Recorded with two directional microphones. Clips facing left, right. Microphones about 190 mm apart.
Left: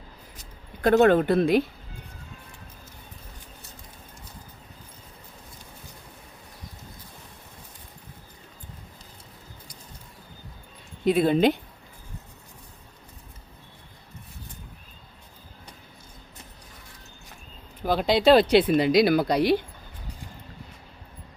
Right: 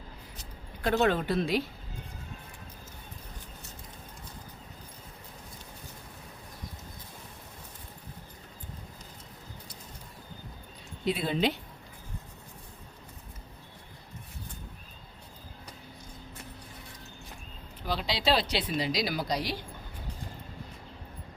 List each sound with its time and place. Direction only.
0.8 s speech: 50° left (ahead or behind)
11.0 s speech: 50° left (ahead or behind)
17.8 s speech: 50° left (ahead or behind)